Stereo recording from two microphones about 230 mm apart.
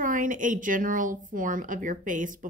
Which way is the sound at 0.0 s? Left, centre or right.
Right.